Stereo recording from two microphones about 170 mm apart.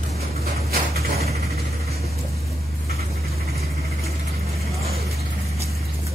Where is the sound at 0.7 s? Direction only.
65° right (ahead or behind).